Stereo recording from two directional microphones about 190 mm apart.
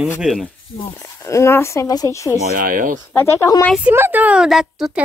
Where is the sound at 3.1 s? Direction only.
10° left (ahead or behind).